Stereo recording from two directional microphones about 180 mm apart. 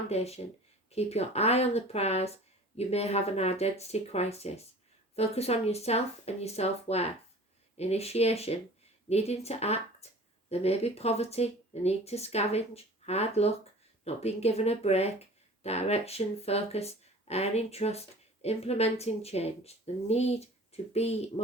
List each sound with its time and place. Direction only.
0.1 s speech: 35° left (ahead or behind)